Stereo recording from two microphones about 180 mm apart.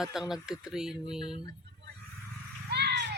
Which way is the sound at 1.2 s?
25° left (ahead or behind).